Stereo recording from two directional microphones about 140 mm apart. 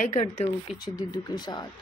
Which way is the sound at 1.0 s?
30° left (ahead or behind).